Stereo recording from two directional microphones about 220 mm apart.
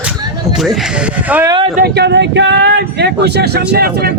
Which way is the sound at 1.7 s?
45° right (ahead or behind).